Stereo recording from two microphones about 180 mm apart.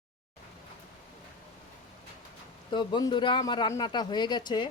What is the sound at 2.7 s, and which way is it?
A man's voice, 25° left (ahead or behind).